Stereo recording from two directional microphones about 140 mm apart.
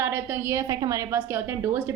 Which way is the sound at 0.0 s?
20° right (ahead or behind).